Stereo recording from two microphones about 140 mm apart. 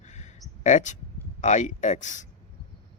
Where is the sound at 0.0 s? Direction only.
55° left (ahead or behind).